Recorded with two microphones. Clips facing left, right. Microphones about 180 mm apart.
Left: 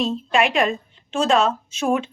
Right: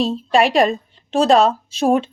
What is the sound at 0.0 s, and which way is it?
A woman's voice, 35° right (ahead or behind).